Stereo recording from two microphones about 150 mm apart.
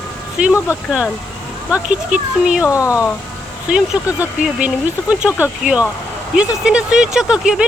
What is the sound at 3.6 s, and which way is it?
Speech, 5° right (ahead or behind).